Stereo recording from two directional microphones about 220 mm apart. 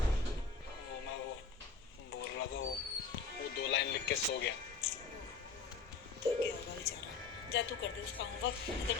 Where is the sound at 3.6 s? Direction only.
50° left (ahead or behind).